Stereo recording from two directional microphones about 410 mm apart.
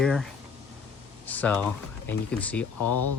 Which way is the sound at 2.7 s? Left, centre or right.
Left.